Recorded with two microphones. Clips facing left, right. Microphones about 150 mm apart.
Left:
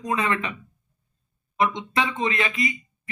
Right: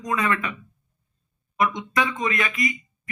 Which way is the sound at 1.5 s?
25° left (ahead or behind).